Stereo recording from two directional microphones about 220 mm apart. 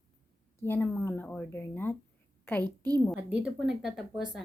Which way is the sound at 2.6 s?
15° right (ahead or behind).